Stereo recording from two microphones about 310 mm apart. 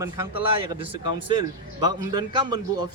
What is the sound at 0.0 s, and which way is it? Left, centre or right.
Speech, centre.